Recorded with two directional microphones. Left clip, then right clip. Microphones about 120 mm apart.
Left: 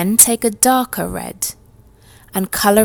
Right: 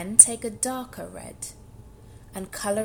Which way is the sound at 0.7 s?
90° left.